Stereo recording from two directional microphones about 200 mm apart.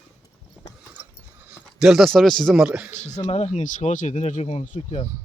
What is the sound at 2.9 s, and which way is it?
Speech, 35° left (ahead or behind).